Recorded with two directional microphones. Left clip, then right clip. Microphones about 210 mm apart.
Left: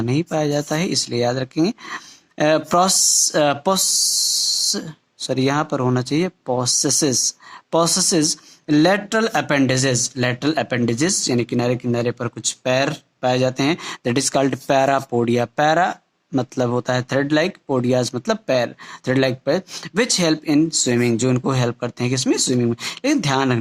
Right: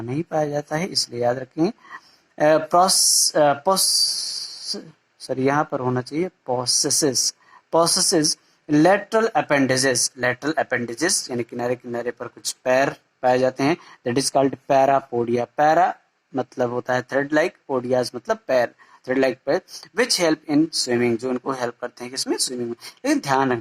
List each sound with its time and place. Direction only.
0.3 s speech: 35° left (ahead or behind)
5.3 s speech: 35° left (ahead or behind)